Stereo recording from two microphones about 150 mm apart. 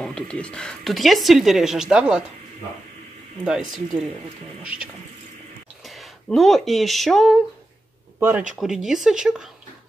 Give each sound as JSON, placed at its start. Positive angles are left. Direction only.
{"t": 0.0, "sound": "a woman's voice", "side_deg": 5}
{"t": 3.4, "sound": "a woman's voice", "side_deg": 0}
{"t": 5.9, "sound": "speech", "side_deg": 0}
{"t": 8.2, "sound": "a woman's voice", "side_deg": -15}